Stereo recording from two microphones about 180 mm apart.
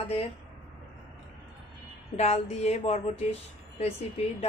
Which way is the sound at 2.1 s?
35° left (ahead or behind).